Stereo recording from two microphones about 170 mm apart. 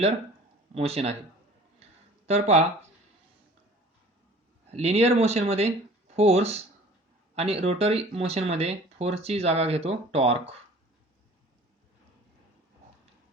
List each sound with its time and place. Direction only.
0.7 s speech: 35° right (ahead or behind)
2.2 s speech: 40° right (ahead or behind)
4.7 s speech: 40° right (ahead or behind)